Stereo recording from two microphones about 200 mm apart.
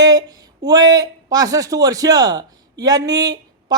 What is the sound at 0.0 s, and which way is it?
A man's voice, 20° right (ahead or behind).